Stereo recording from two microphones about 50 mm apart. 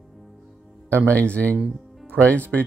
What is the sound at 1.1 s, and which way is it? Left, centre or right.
Speech, left.